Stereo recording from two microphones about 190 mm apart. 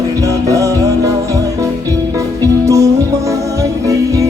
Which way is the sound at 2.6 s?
15° right (ahead or behind).